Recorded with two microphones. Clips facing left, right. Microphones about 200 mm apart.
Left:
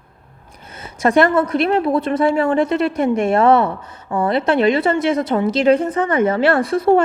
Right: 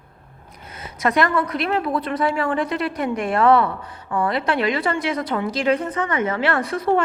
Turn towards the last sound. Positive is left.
turn(degrees=30)  # may be behind; listen again after turning